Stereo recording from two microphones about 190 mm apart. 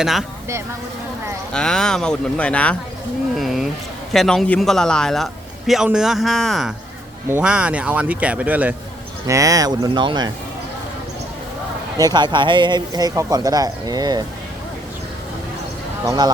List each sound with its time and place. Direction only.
0.0 s a man's voice: centre (ahead or behind)
1.5 s a man's voice: 5° left (ahead or behind); by 10.3 s 25° right (ahead or behind)
11.9 s speech: 20° right (ahead or behind)
16.0 s speech: 20° right (ahead or behind)